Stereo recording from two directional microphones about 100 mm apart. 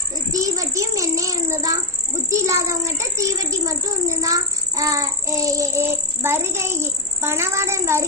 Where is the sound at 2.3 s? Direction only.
30° right (ahead or behind).